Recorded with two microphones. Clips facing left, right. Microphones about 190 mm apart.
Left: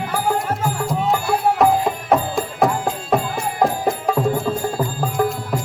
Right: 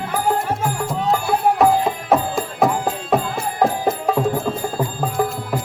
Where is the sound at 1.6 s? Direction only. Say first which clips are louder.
Even; centre (ahead or behind).